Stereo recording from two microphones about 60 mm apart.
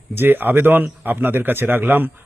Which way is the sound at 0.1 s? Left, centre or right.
Right.